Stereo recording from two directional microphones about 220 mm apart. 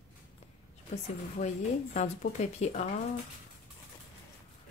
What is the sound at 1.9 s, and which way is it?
Speech, 30° left (ahead or behind).